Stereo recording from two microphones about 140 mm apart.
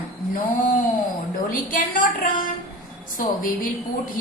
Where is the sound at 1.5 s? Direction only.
80° left.